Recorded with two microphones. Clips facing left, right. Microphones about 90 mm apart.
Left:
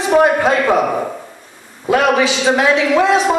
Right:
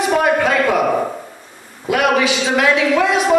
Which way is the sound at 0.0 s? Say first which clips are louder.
Left 3 dB; 25° left (ahead or behind).